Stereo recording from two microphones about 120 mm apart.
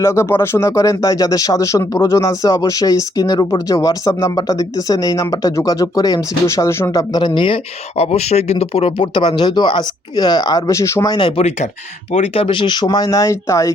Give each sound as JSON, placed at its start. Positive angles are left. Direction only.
{"t": 0.0, "sound": "speech", "side_deg": 20}
{"t": 11.2, "sound": "speech", "side_deg": 45}
{"t": 12.1, "sound": "speech", "side_deg": 60}